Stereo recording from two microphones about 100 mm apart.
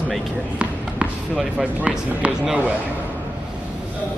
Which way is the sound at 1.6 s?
15° right (ahead or behind).